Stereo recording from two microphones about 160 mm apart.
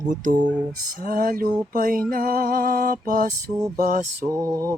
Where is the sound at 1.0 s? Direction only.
65° right (ahead or behind).